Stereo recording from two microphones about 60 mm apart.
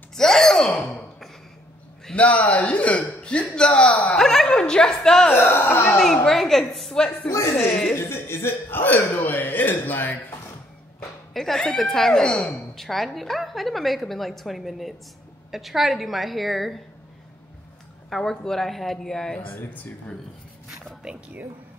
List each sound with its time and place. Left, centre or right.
0.1 s gasp: centre
2.1 s speech: left
4.2 s speech: centre
5.3 s speech: left
6.2 s a woman's voice: centre
7.2 s speech: left
11.0 s speech: centre
12.7 s a woman's voice: centre
18.1 s speech: centre
19.5 s speech: left
20.8 s a woman's voice: centre